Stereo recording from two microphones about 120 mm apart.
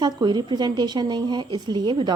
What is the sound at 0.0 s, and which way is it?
A woman's voice, 35° right (ahead or behind).